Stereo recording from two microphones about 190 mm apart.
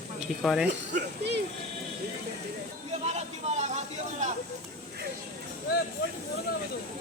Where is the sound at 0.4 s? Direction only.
Centre (ahead or behind).